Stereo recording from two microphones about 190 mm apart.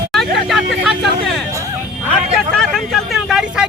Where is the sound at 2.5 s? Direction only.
Centre (ahead or behind).